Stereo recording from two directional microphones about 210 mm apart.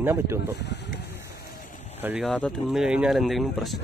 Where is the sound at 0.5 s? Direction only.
55° left (ahead or behind).